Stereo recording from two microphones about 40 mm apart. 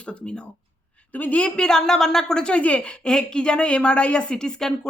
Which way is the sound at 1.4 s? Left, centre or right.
Left.